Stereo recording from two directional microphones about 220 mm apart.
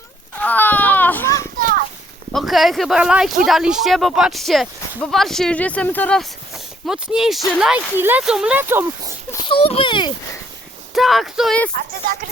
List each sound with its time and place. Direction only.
0.3 s children playing: 10° left (ahead or behind)
1.5 s children playing: 40° right (ahead or behind)
2.3 s speech: centre (ahead or behind)
9.3 s speech: 25° left (ahead or behind)
10.9 s speech: centre (ahead or behind)